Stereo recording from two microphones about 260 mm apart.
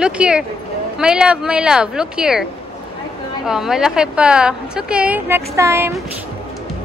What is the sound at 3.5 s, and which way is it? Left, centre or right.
A woman's voice, centre.